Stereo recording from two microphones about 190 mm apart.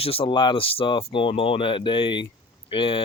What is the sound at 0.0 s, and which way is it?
Speech, 30° left (ahead or behind).